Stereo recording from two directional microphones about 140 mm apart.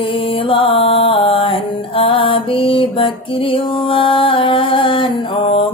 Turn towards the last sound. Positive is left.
turn(degrees=40)  # may be behind; listen again after turning